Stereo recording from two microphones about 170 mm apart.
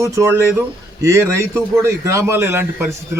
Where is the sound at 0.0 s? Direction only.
15° right (ahead or behind).